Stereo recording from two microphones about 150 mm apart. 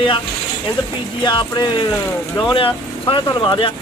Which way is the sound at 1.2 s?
30° left (ahead or behind).